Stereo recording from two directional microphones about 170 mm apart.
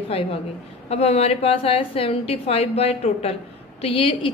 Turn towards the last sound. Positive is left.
turn(degrees=30)  # may be behind; listen again after turning